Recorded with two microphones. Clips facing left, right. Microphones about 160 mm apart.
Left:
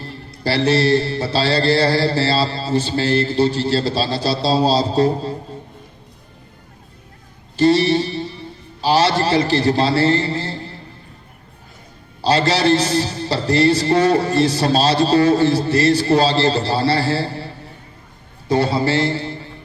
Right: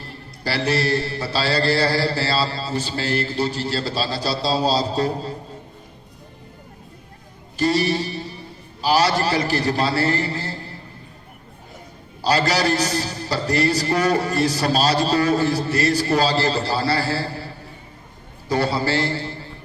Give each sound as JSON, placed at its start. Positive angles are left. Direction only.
{"t": 0.0, "sound": "mantra", "side_deg": 25}
{"t": 7.5, "sound": "music", "side_deg": 30}
{"t": 8.8, "sound": "mantra", "side_deg": 25}
{"t": 12.2, "sound": "mantra", "side_deg": 25}